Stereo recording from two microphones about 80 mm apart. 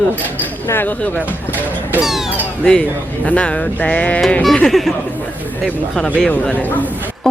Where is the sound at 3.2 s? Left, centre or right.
Centre.